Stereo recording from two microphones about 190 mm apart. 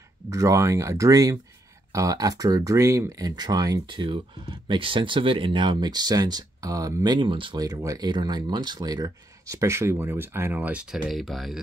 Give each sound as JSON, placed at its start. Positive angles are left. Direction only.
{"t": 0.3, "sound": "speech", "side_deg": -15}